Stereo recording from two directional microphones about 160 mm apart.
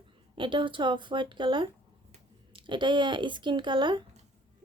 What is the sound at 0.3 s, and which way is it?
A woman's voice, 30° right (ahead or behind).